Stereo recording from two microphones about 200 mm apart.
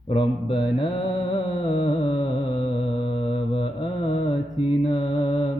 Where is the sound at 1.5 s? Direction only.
25° left (ahead or behind).